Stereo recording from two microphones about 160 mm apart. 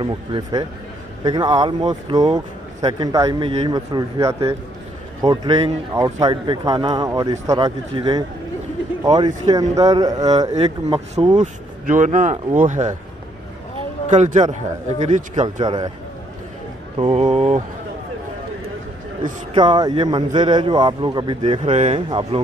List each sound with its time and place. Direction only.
0.0 s speech: 30° right (ahead or behind)
3.4 s speech: 40° right (ahead or behind)
3.7 s speech: 20° right (ahead or behind)
11.3 s a man's voice: 50° right (ahead or behind)
14.0 s a man's voice: 50° right (ahead or behind)
15.6 s speech: 25° right (ahead or behind)
17.0 s speech: 35° right (ahead or behind)
19.5 s speech: 25° right (ahead or behind)
21.7 s speech: 45° right (ahead or behind)